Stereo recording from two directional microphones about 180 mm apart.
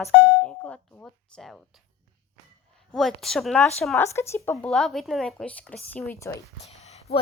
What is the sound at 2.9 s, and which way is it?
A woman's voice, centre (ahead or behind).